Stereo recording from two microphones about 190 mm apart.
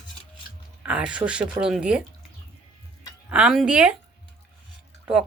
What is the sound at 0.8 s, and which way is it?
Speech, 5° right (ahead or behind).